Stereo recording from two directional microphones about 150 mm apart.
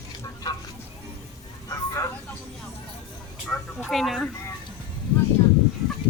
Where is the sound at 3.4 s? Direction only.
5° left (ahead or behind).